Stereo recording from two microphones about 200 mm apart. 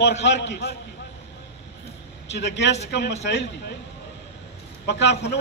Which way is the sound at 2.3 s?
60° left (ahead or behind).